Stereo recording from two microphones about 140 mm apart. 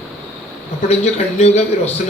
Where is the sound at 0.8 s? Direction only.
50° left (ahead or behind).